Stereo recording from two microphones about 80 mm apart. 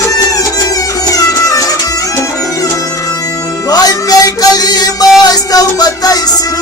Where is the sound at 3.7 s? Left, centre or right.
Left.